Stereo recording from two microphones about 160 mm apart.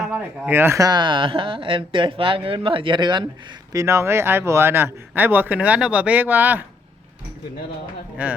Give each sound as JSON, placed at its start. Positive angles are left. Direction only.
{"t": 0.0, "sound": "speech", "side_deg": -5}
{"t": 8.2, "sound": "speech", "side_deg": -10}